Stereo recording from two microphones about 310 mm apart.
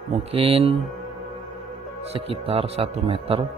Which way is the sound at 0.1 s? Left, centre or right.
Centre.